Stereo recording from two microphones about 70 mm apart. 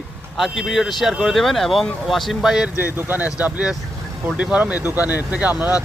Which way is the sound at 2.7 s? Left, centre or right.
Right.